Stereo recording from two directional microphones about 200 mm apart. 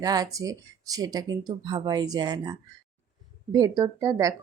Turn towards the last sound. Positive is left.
turn(degrees=-15)  # may be behind; listen again after turning